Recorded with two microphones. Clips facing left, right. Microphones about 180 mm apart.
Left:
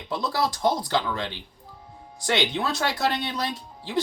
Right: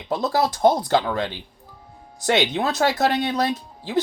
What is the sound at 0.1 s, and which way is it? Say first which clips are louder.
Speech: right 5 dB; 45° right (ahead or behind).